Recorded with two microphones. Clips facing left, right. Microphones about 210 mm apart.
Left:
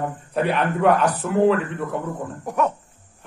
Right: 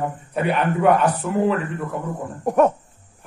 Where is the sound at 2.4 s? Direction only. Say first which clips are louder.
Right 7 dB; 45° right (ahead or behind).